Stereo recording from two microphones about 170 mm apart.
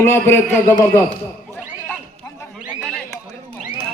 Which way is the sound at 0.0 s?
15° left (ahead or behind).